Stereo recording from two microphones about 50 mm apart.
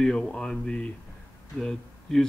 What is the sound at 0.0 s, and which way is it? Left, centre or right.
A man's voice, centre.